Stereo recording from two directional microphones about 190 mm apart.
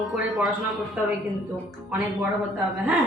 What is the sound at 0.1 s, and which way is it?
Speech, centre (ahead or behind).